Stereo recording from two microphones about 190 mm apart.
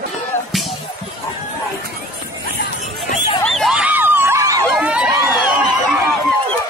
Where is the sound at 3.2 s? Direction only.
Centre (ahead or behind); by 4.6 s 15° right (ahead or behind).